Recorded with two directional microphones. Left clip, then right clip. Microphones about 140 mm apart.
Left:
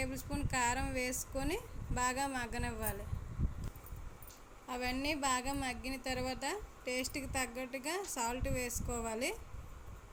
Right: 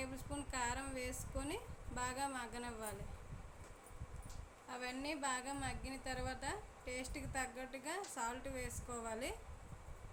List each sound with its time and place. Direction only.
0.0 s a woman's voice: 40° left (ahead or behind)
4.7 s a woman's voice: 50° left (ahead or behind)